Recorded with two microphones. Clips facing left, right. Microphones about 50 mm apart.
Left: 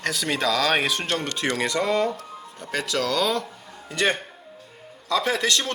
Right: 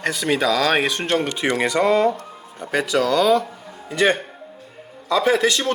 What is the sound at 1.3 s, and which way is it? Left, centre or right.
A man's voice, centre.